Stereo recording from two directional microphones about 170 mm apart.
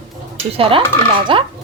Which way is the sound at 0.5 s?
30° right (ahead or behind).